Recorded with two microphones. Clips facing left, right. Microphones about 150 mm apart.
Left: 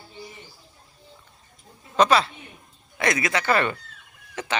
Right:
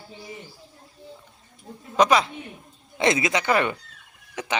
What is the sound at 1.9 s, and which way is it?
Speech, 15° right (ahead or behind).